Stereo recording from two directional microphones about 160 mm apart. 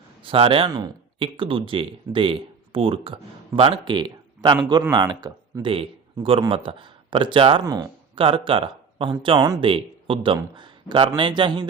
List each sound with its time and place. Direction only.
0.2 s speech: 35° right (ahead or behind)
5.7 s a man's voice: 35° right (ahead or behind)
7.6 s speech: 20° right (ahead or behind)
8.1 s a man's voice: 35° right (ahead or behind)